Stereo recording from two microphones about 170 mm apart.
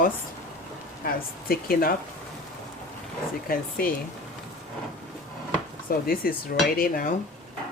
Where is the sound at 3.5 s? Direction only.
60° left (ahead or behind).